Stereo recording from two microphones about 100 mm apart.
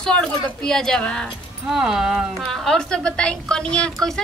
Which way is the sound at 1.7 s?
5° right (ahead or behind).